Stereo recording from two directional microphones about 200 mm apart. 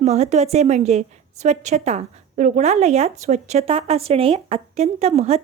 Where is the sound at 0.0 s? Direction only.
35° right (ahead or behind).